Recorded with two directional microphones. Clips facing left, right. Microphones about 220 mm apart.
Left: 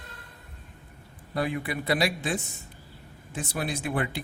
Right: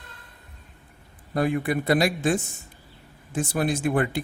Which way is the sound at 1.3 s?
50° right (ahead or behind).